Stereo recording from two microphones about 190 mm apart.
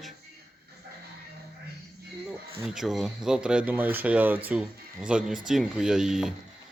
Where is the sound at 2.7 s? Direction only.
Centre (ahead or behind).